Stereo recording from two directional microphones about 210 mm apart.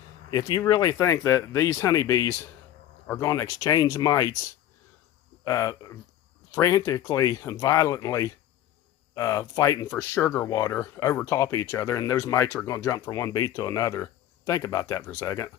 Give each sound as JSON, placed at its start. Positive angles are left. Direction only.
{"t": 0.3, "sound": "speech", "side_deg": 20}
{"t": 5.4, "sound": "speech", "side_deg": 15}